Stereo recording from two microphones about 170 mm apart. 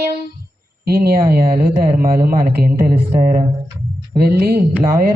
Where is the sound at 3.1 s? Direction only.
45° right (ahead or behind).